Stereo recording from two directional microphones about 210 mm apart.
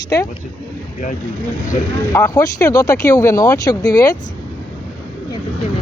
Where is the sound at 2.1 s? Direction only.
15° left (ahead or behind).